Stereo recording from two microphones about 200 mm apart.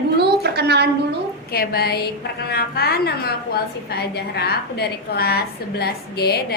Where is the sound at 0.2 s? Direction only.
55° right (ahead or behind).